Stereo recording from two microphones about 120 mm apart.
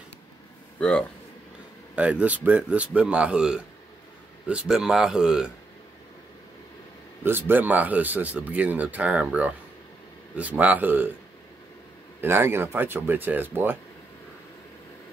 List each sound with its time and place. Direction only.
0.7 s speech: 10° left (ahead or behind)
2.0 s speech: 10° right (ahead or behind)
7.2 s speech: 20° right (ahead or behind)
12.2 s speech: 20° right (ahead or behind)